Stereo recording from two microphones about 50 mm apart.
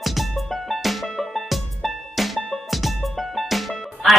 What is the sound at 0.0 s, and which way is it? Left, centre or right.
Music, centre.